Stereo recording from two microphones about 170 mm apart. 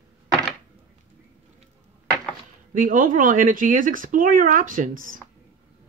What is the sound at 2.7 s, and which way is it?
Speech, 50° right (ahead or behind).